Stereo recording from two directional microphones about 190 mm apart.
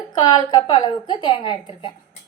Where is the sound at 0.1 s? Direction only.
25° left (ahead or behind).